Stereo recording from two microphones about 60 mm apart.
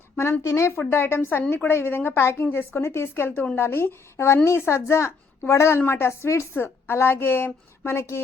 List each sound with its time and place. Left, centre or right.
0.2 s a woman's voice: left
0.9 s a woman's voice: left
6.6 s a woman's voice: left